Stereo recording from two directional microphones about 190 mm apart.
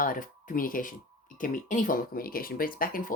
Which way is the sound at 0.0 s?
45° left (ahead or behind).